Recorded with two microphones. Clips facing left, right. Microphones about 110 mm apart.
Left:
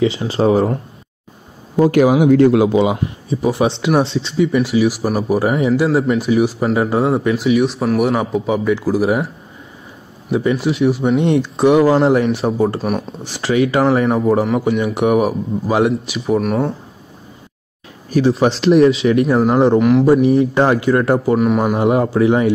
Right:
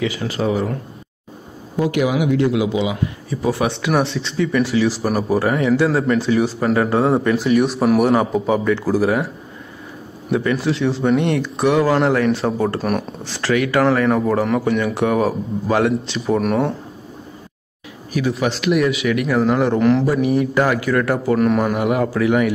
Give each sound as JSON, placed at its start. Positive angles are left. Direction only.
{"t": 0.0, "sound": "speech", "side_deg": 25}
{"t": 1.8, "sound": "speech", "side_deg": 45}
{"t": 3.3, "sound": "a man's voice", "side_deg": 20}
{"t": 7.1, "sound": "speech", "side_deg": 0}
{"t": 9.0, "sound": "speech", "side_deg": 20}
{"t": 10.3, "sound": "a man's voice", "side_deg": 15}
{"t": 12.8, "sound": "speech", "side_deg": 0}
{"t": 13.2, "sound": "a man's voice", "side_deg": 20}
{"t": 16.3, "sound": "speech", "side_deg": 0}
{"t": 18.1, "sound": "speech", "side_deg": 35}
{"t": 19.8, "sound": "speech", "side_deg": 5}
{"t": 20.1, "sound": "speech", "side_deg": 30}
{"t": 21.4, "sound": "a man's voice", "side_deg": 5}
{"t": 21.7, "sound": "speech", "side_deg": 25}